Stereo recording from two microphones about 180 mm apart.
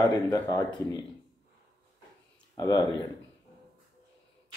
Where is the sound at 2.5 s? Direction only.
20° left (ahead or behind).